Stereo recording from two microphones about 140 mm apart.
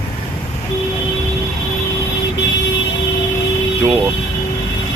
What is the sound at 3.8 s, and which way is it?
Speech, 10° left (ahead or behind).